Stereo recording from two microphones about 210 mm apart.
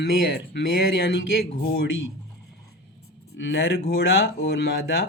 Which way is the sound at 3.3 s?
60° left (ahead or behind).